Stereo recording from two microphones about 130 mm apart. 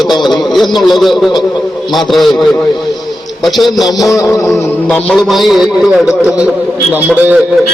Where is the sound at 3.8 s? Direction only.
30° left (ahead or behind).